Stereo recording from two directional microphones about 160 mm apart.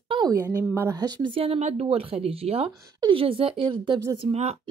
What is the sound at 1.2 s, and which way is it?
Speech, 35° right (ahead or behind).